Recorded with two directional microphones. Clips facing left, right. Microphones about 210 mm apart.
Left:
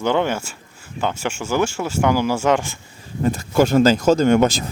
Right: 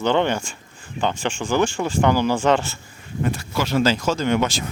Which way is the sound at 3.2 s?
45° left (ahead or behind).